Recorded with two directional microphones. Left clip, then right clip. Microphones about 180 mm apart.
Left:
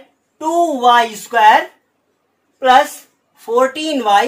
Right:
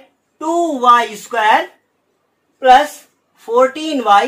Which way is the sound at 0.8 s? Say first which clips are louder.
Right 2 dB; 30° left (ahead or behind).